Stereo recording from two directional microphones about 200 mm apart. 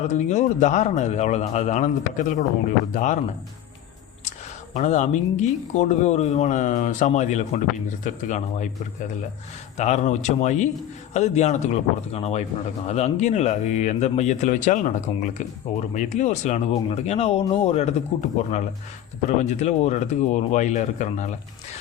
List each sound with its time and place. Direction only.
0.0 s speech: 35° left (ahead or behind)
9.7 s speech: 35° left (ahead or behind)